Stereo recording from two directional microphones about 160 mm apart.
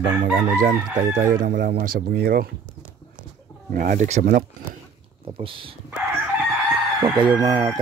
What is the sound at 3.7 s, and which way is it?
Speech, 60° right (ahead or behind).